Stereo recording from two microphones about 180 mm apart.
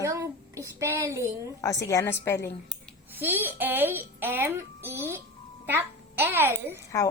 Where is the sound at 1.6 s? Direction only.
20° left (ahead or behind).